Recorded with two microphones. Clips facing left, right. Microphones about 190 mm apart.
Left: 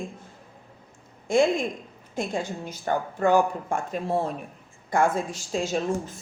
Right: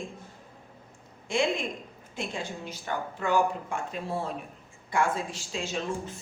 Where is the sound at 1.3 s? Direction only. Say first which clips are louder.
Left 6 dB; 45° left (ahead or behind).